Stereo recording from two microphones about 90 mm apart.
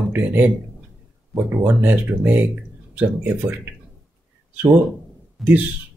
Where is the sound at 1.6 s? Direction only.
20° right (ahead or behind).